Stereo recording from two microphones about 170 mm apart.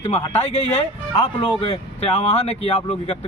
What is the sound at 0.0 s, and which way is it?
A man's voice, 35° left (ahead or behind).